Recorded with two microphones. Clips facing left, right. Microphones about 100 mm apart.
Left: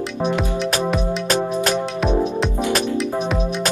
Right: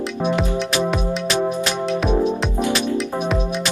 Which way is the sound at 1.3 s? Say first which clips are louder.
Left 2 dB; 45° left (ahead or behind).